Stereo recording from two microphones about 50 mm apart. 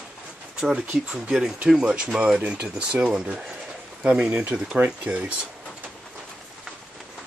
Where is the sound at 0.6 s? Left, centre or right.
Right.